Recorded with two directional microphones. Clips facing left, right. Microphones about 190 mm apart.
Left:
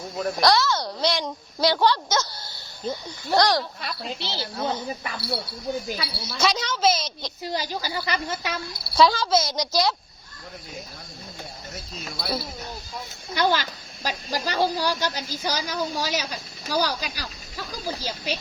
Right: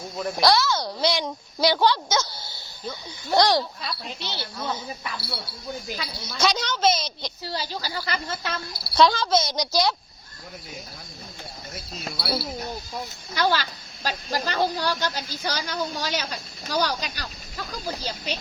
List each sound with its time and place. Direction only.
0.2 s a child's voice: centre (ahead or behind)
3.3 s a child's voice: 10° right (ahead or behind)
4.6 s speech: 45° left (ahead or behind)
6.0 s a child's voice: 5° left (ahead or behind)
7.4 s speech: 15° left (ahead or behind)
12.2 s a child's voice: 5° right (ahead or behind)
13.3 s speech: 15° left (ahead or behind)